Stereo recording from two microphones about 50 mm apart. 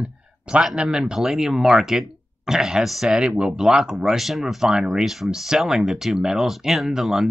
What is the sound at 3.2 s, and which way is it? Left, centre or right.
Speech, centre.